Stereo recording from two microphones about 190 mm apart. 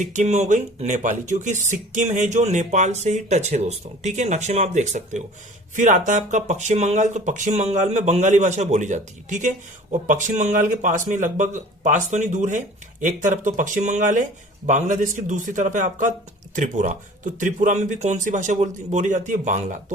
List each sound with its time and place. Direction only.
0.0 s speech: 40° right (ahead or behind)